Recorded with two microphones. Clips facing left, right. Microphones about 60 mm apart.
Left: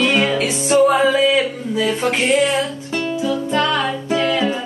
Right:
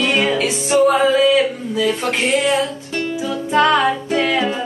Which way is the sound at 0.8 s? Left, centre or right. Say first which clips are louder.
Right 1 dB; centre.